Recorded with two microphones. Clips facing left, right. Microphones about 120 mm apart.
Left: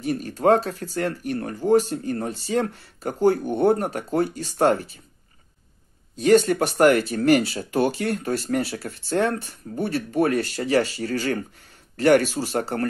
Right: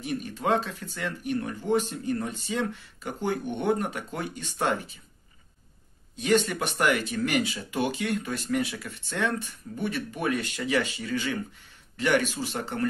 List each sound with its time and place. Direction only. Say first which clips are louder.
0.0 s speech: left 8 dB; 40° left (ahead or behind)
6.1 s speech: left 7 dB; 40° left (ahead or behind)